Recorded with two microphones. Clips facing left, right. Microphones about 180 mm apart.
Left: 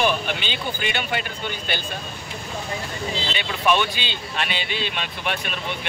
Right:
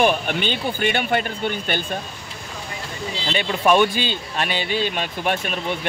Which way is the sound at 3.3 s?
45° right (ahead or behind).